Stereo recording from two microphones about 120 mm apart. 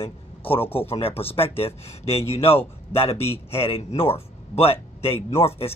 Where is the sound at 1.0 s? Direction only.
55° left (ahead or behind).